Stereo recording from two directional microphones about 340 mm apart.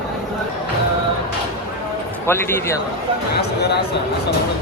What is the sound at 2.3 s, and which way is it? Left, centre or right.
Speech, centre.